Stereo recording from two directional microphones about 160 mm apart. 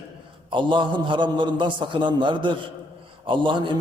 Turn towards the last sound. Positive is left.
turn(degrees=-30)  # may be behind; listen again after turning